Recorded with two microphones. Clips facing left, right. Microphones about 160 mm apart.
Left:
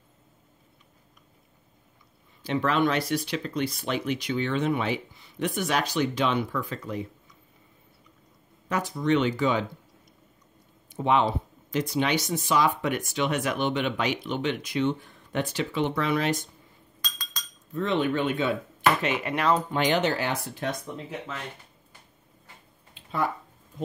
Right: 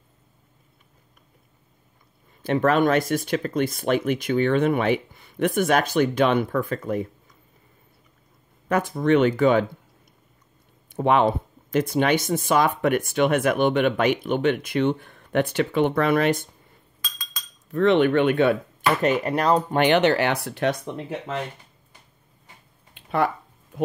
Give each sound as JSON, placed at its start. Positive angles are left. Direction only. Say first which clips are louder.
{"t": 2.4, "sound": "speech", "louder": "right 5 dB", "side_deg": -50}
{"t": 8.6, "sound": "speech", "louder": "right 5 dB", "side_deg": -55}
{"t": 11.0, "sound": "speech", "louder": "right 4 dB", "side_deg": -55}
{"t": 17.6, "sound": "speech", "louder": "right 8 dB", "side_deg": -70}
{"t": 18.9, "sound": "speech", "louder": "right 6 dB", "side_deg": -45}
{"t": 19.8, "sound": "speech", "louder": "right 6 dB", "side_deg": -70}
{"t": 22.9, "sound": "a sound", "louder": "right 6 dB", "side_deg": -65}